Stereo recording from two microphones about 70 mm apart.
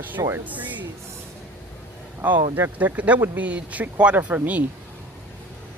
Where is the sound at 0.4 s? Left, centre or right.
Right.